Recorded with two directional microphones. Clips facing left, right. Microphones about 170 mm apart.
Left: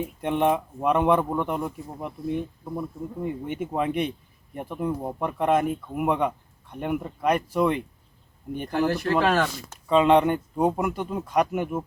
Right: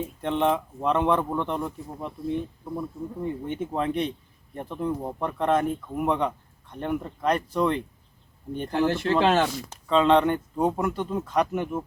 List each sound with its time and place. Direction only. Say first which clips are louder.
0.0 s speech: left 1 dB; 15° left (ahead or behind)
8.9 s speech: right 1 dB; 25° right (ahead or behind)
9.8 s speech: left 1 dB; 10° left (ahead or behind)